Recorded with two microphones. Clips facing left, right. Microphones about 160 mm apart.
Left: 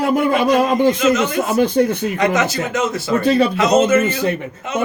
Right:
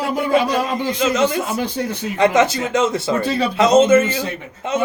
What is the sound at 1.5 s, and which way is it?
Speech, 55° left (ahead or behind).